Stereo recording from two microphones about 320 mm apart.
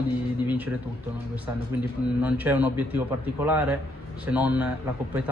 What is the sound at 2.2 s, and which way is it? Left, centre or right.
Speech, centre.